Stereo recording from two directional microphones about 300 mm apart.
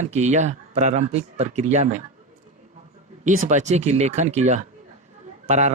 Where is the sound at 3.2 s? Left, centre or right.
Right.